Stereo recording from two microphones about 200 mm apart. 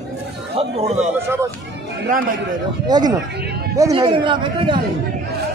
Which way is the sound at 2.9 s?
20° right (ahead or behind).